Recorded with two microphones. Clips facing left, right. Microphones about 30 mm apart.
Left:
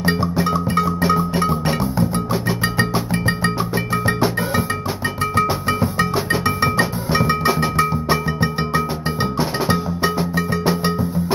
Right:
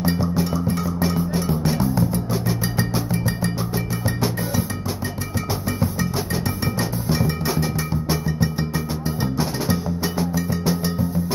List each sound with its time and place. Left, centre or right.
0.0 s music: left
1.0 s music: left
1.4 s music: left
3.1 s music: left
6.6 s music: left
10.6 s music: left